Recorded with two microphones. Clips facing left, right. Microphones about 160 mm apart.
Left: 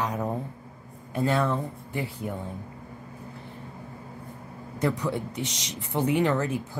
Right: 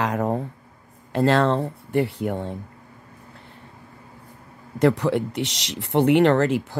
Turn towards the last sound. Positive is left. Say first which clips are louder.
# right 7 dB
turn(degrees=-75)  # may be behind; listen again after turning